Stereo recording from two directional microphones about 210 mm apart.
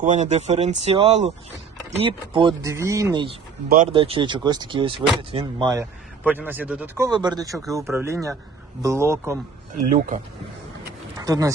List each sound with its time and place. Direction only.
0.0 s speech: 35° right (ahead or behind)
6.2 s speech: 10° right (ahead or behind)
9.7 s speech: 40° right (ahead or behind)
11.2 s speech: 15° right (ahead or behind)